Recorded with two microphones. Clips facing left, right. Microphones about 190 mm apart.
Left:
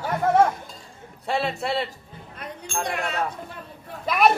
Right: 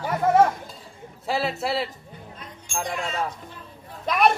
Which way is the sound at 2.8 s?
65° left (ahead or behind).